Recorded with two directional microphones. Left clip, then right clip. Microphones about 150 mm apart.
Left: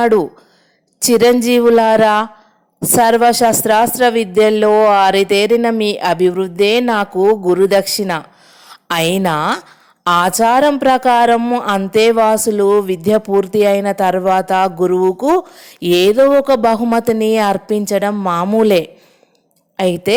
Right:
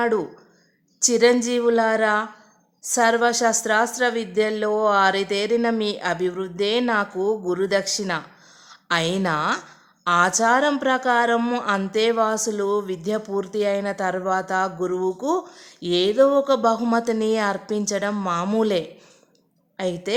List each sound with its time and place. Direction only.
0.0 s a woman's voice: 40° left (ahead or behind)
11.3 s speech: 20° left (ahead or behind)
11.9 s a woman's voice: 40° left (ahead or behind)